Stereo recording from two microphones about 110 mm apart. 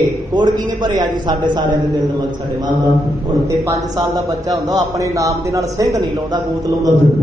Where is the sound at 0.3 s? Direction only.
40° right (ahead or behind).